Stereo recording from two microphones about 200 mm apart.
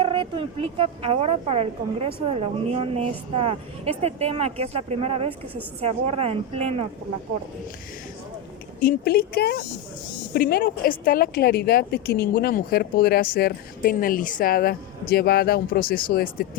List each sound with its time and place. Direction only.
0.0 s a woman's voice: 25° right (ahead or behind)
8.8 s a woman's voice: 45° left (ahead or behind)